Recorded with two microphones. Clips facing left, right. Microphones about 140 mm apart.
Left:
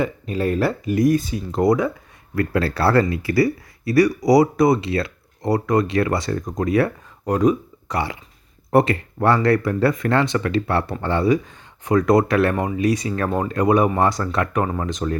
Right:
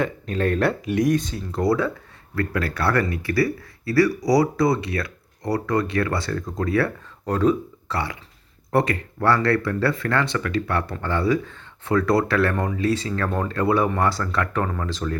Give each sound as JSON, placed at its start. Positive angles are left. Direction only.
{"t": 0.0, "sound": "speech", "side_deg": 5}
{"t": 1.5, "sound": "speech", "side_deg": 20}